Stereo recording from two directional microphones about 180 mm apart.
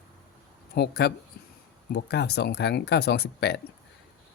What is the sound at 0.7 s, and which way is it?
Speech, 65° left (ahead or behind).